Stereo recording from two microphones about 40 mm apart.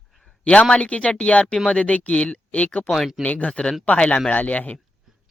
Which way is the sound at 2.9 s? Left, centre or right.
Centre.